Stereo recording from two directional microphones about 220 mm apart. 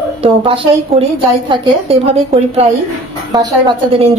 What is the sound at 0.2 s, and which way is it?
A woman's voice, 25° right (ahead or behind).